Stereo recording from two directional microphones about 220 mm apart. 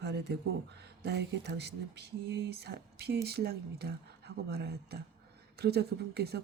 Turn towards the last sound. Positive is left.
turn(degrees=-45)  # may be behind; listen again after turning